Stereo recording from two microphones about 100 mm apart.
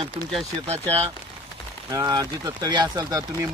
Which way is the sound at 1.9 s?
35° right (ahead or behind).